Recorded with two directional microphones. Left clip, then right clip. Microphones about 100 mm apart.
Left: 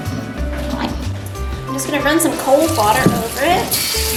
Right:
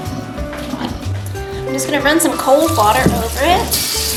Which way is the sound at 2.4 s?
5° right (ahead or behind).